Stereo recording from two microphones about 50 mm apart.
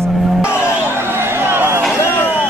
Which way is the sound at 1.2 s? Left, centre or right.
Right.